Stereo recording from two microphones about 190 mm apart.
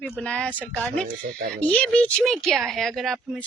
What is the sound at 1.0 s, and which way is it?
Speech, 40° right (ahead or behind).